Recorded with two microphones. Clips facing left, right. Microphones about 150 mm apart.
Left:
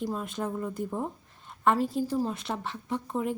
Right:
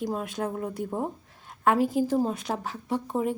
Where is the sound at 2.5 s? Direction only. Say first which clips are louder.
Right 3 dB; 35° right (ahead or behind).